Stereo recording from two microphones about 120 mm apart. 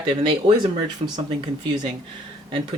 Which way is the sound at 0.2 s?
45° right (ahead or behind).